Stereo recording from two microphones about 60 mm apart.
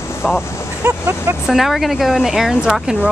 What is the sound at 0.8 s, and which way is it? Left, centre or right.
Speech, right.